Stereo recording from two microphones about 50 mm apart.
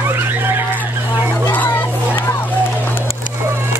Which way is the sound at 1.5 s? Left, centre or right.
Left.